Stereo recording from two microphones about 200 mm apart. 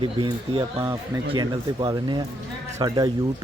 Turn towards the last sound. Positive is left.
turn(degrees=-20)  # may be behind; listen again after turning